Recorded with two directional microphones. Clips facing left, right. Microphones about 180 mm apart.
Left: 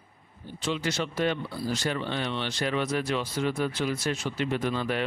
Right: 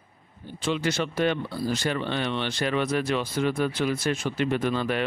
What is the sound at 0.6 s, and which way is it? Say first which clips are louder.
Speech: right 3 dB; 55° right (ahead or behind).